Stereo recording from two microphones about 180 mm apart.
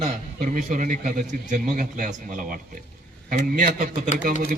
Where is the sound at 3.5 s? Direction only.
45° right (ahead or behind).